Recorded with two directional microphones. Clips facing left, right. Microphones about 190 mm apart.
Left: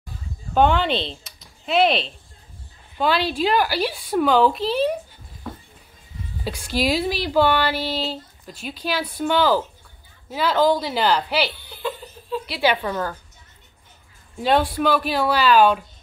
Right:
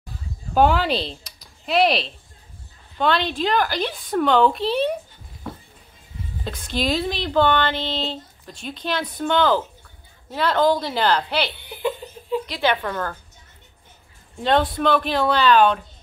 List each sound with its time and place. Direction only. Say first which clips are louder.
0.6 s a woman's voice: even; 5° right (ahead or behind)
6.4 s a woman's voice: left 2 dB; 10° left (ahead or behind)
11.5 s giggle: right 4 dB; 20° right (ahead or behind)
12.4 s speech: left 4 dB; 10° left (ahead or behind)
14.4 s speech: even; 5° left (ahead or behind)